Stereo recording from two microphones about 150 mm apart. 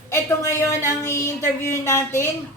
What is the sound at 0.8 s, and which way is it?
Speech, 20° left (ahead or behind).